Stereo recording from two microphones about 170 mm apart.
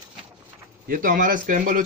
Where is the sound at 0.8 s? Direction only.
55° right (ahead or behind).